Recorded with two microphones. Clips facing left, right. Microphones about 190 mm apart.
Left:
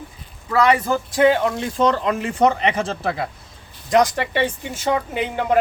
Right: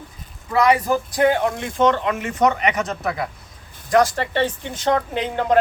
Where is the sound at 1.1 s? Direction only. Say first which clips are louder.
Left 3 dB; 30° left (ahead or behind).